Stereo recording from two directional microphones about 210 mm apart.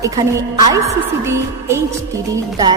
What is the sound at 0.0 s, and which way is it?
A woman's voice, 15° right (ahead or behind).